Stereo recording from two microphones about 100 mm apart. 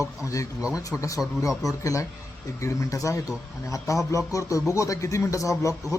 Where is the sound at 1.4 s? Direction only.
35° left (ahead or behind).